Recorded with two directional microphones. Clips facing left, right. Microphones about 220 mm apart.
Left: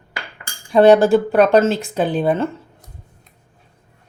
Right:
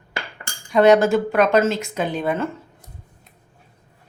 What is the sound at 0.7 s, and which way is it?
Speech, 30° left (ahead or behind).